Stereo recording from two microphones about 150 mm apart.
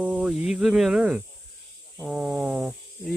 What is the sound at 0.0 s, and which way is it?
Speech, 10° right (ahead or behind).